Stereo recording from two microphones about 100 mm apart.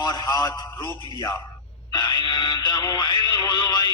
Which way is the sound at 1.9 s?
45° left (ahead or behind).